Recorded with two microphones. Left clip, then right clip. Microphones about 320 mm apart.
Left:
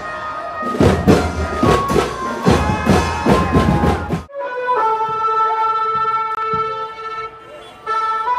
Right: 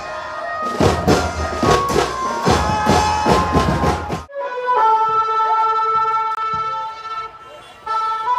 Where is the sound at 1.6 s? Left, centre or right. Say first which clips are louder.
Left 1 dB; right.